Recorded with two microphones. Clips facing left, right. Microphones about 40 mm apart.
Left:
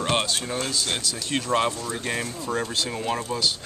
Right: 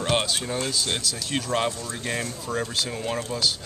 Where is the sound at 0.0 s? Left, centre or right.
Centre.